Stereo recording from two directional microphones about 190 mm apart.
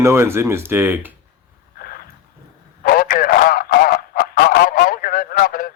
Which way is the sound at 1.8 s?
50° left (ahead or behind).